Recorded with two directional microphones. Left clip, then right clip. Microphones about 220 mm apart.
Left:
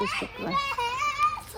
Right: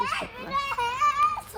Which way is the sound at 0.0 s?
15° right (ahead or behind).